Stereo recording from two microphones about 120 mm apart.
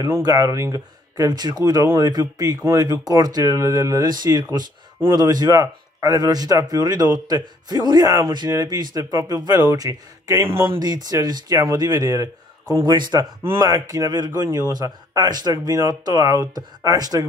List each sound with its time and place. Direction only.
0.0 s speech: 30° right (ahead or behind)